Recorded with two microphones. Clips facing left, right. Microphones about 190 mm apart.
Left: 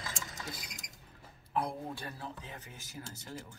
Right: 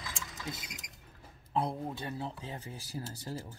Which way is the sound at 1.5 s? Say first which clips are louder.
Right 2 dB; 20° right (ahead or behind).